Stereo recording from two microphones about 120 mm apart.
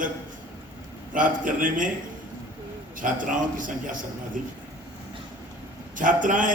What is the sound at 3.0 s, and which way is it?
A man's voice, 90° right.